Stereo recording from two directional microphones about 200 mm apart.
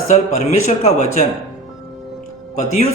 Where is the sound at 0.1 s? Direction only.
35° left (ahead or behind).